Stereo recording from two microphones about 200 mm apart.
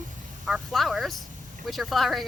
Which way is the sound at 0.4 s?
Centre (ahead or behind).